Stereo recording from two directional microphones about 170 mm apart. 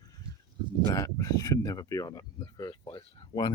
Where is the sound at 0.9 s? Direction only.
20° left (ahead or behind).